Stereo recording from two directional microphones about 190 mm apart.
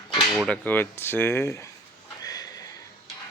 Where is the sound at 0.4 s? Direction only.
10° left (ahead or behind).